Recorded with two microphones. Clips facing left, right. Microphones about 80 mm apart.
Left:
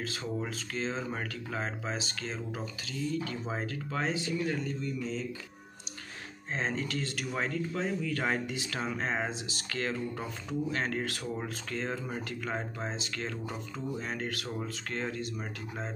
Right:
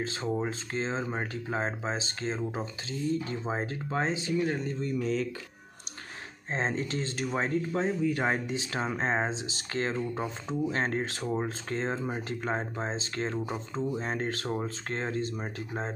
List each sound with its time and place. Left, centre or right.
0.0 s speech: right
5.0 s speech: right
6.5 s speech: right